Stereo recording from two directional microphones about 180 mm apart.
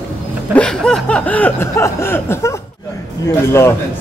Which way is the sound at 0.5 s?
5° left (ahead or behind).